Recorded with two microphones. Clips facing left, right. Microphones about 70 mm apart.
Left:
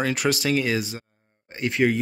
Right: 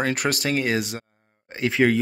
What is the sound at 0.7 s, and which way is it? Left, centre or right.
Speech, right.